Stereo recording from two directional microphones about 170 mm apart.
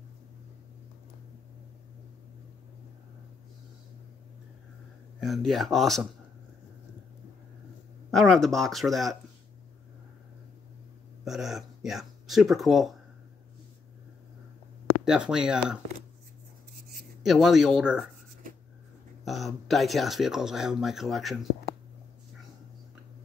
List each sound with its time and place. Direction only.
5.2 s speech: centre (ahead or behind)
8.1 s speech: centre (ahead or behind)
11.2 s speech: centre (ahead or behind)
15.0 s speech: 5° right (ahead or behind)
17.2 s speech: centre (ahead or behind)
19.2 s speech: centre (ahead or behind)